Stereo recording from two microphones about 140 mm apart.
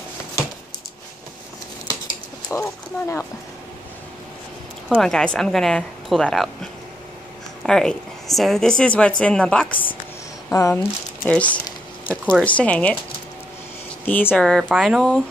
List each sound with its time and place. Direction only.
2.6 s speech: 20° left (ahead or behind)
4.8 s a woman's voice: 5° left (ahead or behind)
12.1 s speech: 5° right (ahead or behind)
12.4 s a woman's voice: 10° left (ahead or behind)
14.0 s a woman's voice: 10° left (ahead or behind)